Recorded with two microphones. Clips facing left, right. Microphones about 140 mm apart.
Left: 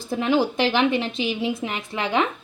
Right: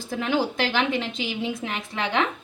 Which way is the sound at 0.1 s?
20° left (ahead or behind).